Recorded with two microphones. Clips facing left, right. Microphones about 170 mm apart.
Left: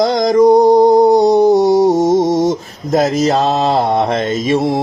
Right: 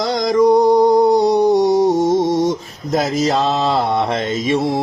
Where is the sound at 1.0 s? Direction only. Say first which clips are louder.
Left 4 dB; 40° left (ahead or behind).